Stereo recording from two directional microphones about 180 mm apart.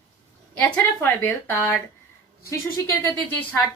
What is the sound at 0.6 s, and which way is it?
Speech, 10° left (ahead or behind).